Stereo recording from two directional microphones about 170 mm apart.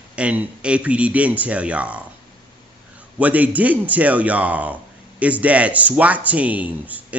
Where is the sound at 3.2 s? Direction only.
10° right (ahead or behind).